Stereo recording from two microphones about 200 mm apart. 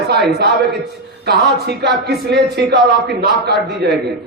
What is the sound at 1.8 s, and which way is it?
A man's voice, 55° right (ahead or behind).